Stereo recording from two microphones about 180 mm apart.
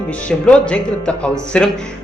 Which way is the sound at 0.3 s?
5° left (ahead or behind).